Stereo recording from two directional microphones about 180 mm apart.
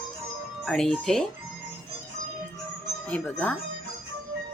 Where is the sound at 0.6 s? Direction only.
Centre (ahead or behind).